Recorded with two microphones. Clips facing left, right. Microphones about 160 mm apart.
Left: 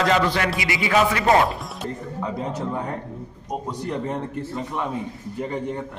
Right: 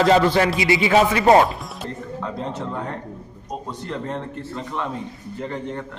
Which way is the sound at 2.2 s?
10° left (ahead or behind).